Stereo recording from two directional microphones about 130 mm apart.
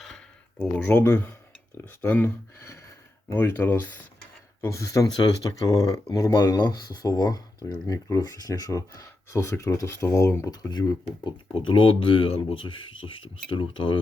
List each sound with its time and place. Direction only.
0.6 s speech: 15° left (ahead or behind); by 14.0 s 40° left (ahead or behind)